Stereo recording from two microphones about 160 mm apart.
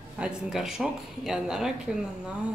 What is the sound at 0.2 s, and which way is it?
A woman's voice, 5° right (ahead or behind).